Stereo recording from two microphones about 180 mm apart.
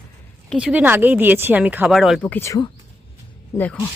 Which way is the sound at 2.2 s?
10° left (ahead or behind).